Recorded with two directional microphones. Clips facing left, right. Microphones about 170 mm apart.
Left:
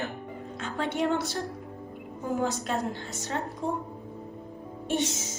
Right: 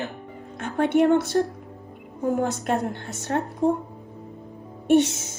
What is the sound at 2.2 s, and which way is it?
A woman's voice, 60° right (ahead or behind).